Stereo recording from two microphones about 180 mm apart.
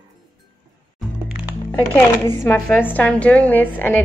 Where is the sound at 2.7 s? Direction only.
10° left (ahead or behind).